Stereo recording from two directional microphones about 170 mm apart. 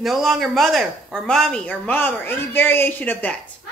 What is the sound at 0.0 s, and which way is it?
Speech, centre (ahead or behind).